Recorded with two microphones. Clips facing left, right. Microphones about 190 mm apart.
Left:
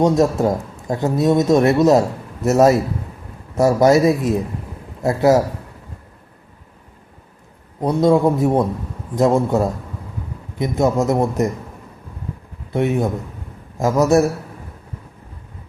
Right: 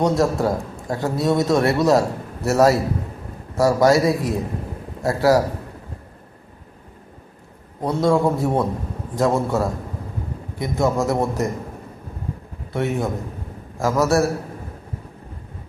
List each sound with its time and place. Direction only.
0.0 s a man's voice: 20° left (ahead or behind)
7.8 s a man's voice: 20° left (ahead or behind)
12.7 s a man's voice: 20° left (ahead or behind)